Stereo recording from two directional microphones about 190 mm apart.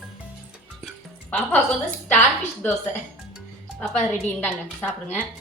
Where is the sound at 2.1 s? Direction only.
10° left (ahead or behind).